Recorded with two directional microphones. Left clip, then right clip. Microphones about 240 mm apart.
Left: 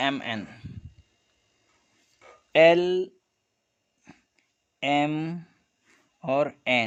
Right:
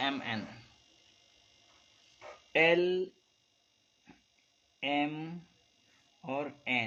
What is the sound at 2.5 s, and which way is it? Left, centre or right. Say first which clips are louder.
Speech: left 9 dB; left.